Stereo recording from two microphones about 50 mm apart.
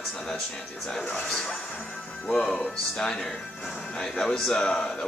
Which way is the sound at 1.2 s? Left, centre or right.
Centre.